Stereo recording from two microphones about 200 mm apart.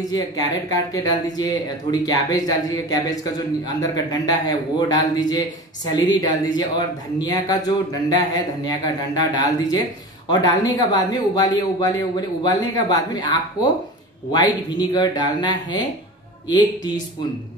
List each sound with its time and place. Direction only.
0.9 s speech: 20° left (ahead or behind)